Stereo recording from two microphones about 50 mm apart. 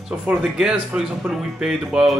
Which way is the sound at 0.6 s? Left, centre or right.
Centre.